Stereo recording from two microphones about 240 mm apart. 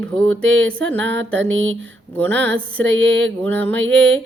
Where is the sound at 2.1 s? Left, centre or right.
Centre.